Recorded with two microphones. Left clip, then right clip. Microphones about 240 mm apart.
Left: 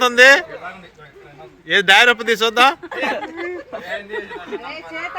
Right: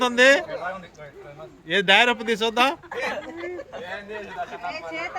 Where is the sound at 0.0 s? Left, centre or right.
Centre.